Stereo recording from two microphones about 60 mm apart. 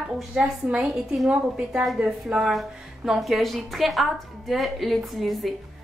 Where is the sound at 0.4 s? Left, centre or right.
Centre.